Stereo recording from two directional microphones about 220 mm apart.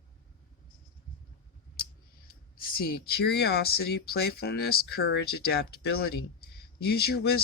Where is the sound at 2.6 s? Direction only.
45° left (ahead or behind).